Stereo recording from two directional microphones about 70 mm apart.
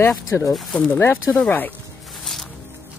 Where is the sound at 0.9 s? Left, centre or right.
Left.